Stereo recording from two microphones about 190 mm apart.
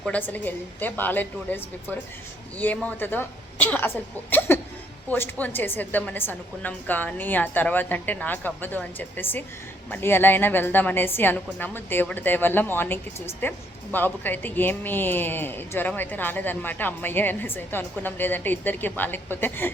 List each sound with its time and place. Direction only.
0.0 s speech: 5° left (ahead or behind)